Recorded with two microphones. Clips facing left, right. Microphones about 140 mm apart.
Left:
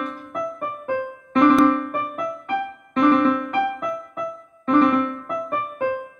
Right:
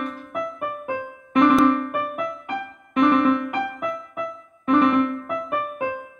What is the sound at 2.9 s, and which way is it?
Music, 20° right (ahead or behind).